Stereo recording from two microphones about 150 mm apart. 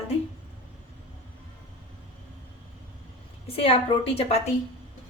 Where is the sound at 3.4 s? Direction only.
40° left (ahead or behind).